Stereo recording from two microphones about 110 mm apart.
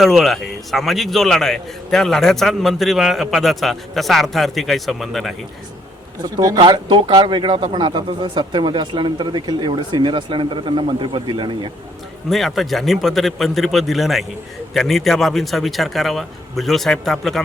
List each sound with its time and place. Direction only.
0.0 s a man's voice: centre (ahead or behind)
6.2 s speech: 35° right (ahead or behind)
12.3 s a man's voice: centre (ahead or behind)